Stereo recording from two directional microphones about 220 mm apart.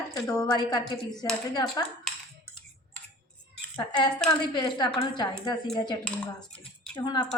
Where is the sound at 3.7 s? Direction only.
20° left (ahead or behind).